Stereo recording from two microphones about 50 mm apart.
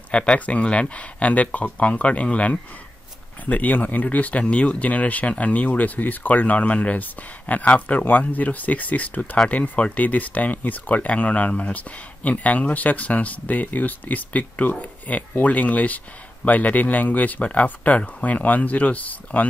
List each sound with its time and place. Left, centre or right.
0.1 s speech: left